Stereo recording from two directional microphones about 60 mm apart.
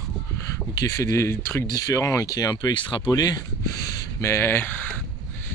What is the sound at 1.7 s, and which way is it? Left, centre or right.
Speech, left.